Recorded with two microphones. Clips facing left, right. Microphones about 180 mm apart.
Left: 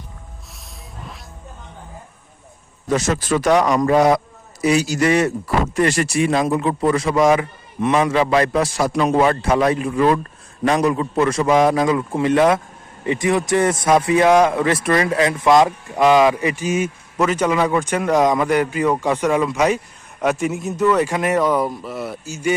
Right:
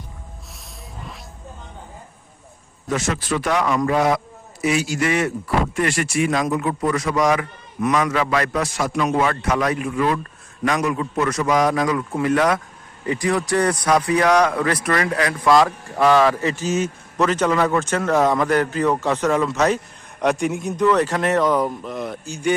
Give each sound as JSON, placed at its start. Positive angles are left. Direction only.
{"t": 2.9, "sound": "a man's voice", "side_deg": 40}